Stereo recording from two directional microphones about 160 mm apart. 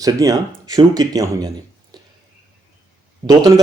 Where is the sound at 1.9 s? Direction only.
25° right (ahead or behind).